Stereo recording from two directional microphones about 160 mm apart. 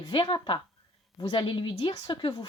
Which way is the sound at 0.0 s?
30° left (ahead or behind).